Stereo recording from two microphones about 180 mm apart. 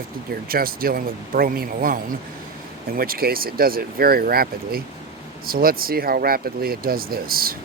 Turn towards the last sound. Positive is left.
turn(degrees=-55)  # may be behind; listen again after turning